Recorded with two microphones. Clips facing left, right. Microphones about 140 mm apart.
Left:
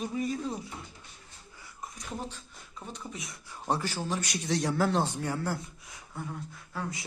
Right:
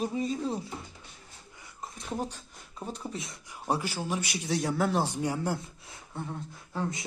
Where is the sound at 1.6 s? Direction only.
25° right (ahead or behind).